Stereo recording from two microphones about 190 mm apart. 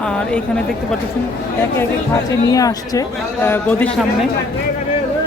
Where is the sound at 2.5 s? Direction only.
20° left (ahead or behind).